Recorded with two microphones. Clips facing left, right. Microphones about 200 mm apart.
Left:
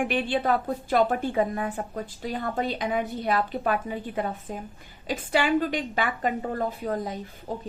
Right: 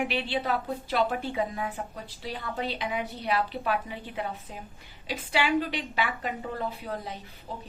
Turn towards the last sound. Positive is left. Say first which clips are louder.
# left 6 dB
turn(degrees=45)  # may be behind; listen again after turning